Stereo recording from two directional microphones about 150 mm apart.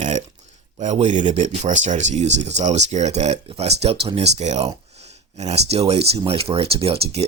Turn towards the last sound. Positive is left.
turn(degrees=-40)  # may be behind; listen again after turning